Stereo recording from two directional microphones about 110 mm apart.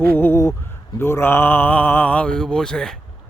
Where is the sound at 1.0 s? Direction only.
25° left (ahead or behind); by 3.0 s 5° left (ahead or behind).